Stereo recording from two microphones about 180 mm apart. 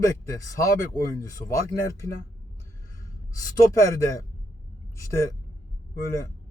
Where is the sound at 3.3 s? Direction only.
20° left (ahead or behind).